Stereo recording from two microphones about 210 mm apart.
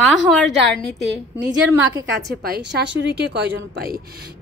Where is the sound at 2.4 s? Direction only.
55° right (ahead or behind).